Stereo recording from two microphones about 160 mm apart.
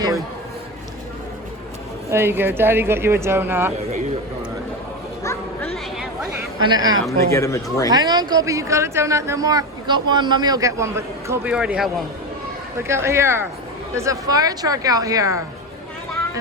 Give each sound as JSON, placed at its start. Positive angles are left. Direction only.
{"t": 2.0, "sound": "speech", "side_deg": -15}
{"t": 6.6, "sound": "speech", "side_deg": -25}
{"t": 7.3, "sound": "speech", "side_deg": 20}
{"t": 7.9, "sound": "speech", "side_deg": -25}
{"t": 11.5, "sound": "a man's voice", "side_deg": -5}
{"t": 12.9, "sound": "speech", "side_deg": -15}